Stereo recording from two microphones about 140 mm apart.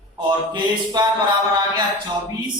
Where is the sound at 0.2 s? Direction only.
30° right (ahead or behind).